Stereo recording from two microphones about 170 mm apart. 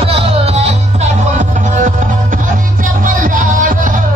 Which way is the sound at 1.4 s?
50° right (ahead or behind).